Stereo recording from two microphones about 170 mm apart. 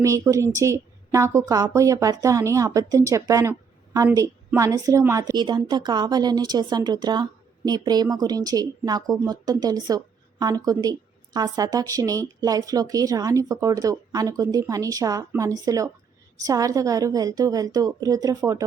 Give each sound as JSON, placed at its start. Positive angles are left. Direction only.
{"t": 0.0, "sound": "a woman's voice", "side_deg": -20}